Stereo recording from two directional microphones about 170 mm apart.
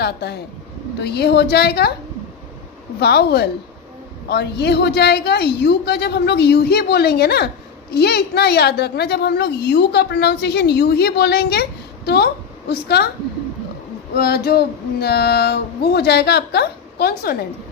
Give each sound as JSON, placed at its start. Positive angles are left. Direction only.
{"t": 0.0, "sound": "a woman's voice", "side_deg": 75}
{"t": 3.0, "sound": "a woman's voice", "side_deg": 70}
{"t": 14.2, "sound": "a woman's voice", "side_deg": 65}